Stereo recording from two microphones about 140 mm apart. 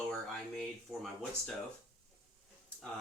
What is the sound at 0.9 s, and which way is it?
Speech, 20° right (ahead or behind).